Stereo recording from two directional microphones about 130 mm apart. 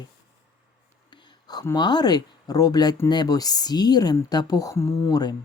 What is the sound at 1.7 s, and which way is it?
Speech, 35° left (ahead or behind).